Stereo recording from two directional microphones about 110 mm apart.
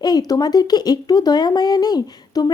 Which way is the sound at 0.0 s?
35° left (ahead or behind).